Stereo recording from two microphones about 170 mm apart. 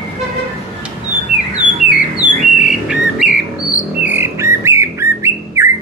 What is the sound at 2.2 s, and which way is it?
Bird, 5° right (ahead or behind).